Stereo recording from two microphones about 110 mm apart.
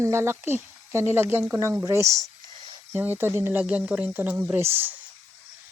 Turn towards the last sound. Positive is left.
turn(degrees=-20)  # may be behind; listen again after turning